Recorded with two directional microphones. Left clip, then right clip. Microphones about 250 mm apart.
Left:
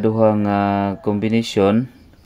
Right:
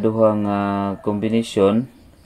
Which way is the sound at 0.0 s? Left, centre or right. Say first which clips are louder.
Left 1 dB; centre.